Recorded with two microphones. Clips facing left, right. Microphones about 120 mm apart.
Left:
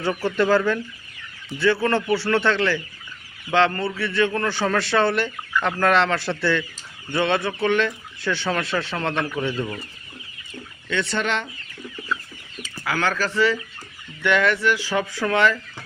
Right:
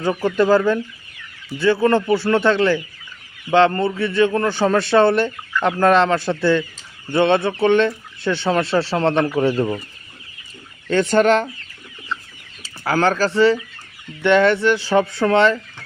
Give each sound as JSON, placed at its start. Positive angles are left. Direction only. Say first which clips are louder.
{"t": 0.2, "sound": "speech", "louder": "right 4 dB", "side_deg": -15}
{"t": 10.8, "sound": "speech", "louder": "right 10 dB", "side_deg": -45}
{"t": 12.6, "sound": "speech", "louder": "right 6 dB", "side_deg": -35}